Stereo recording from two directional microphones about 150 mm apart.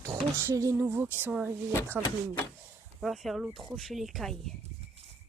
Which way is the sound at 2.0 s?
20° left (ahead or behind).